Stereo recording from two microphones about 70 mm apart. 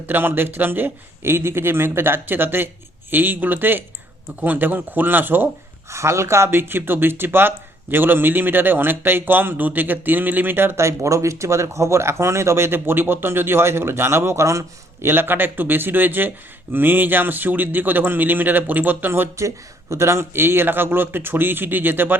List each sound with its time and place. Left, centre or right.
0.1 s speech: right
5.9 s speech: right
15.0 s speech: right
19.4 s speech: right